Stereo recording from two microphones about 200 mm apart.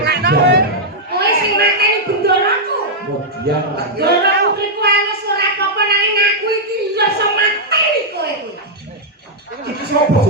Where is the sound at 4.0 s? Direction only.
55° right (ahead or behind).